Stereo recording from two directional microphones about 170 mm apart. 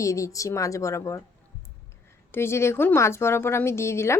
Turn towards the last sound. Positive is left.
turn(degrees=15)  # may be behind; listen again after turning